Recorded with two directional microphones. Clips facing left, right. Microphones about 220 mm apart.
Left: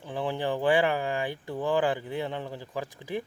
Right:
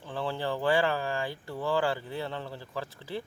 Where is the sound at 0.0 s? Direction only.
15° left (ahead or behind).